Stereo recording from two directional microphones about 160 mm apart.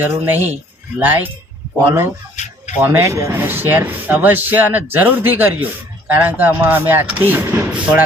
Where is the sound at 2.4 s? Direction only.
45° left (ahead or behind).